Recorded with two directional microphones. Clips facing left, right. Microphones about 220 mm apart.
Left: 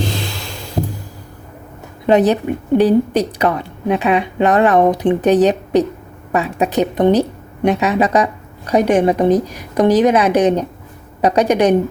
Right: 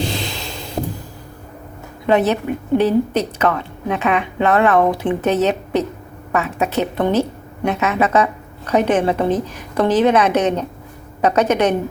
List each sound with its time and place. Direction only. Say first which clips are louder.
2.0 s speech: left 3 dB; 15° left (ahead or behind)